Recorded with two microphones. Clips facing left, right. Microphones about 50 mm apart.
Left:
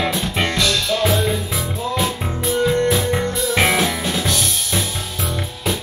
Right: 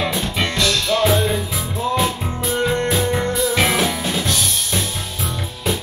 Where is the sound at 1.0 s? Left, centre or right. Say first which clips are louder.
Right 1 dB; centre.